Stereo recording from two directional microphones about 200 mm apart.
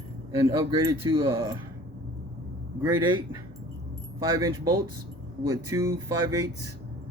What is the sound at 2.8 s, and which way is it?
A man's voice, 20° right (ahead or behind).